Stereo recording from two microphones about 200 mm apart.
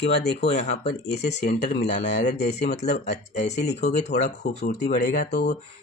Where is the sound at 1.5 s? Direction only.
35° left (ahead or behind).